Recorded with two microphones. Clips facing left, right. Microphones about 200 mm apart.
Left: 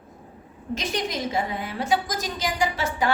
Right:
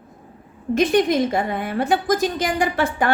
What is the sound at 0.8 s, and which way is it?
A woman's voice, 55° right (ahead or behind).